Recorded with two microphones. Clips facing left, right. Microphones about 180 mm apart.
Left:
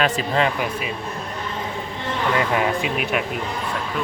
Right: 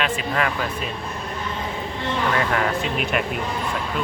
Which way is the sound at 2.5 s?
15° left (ahead or behind).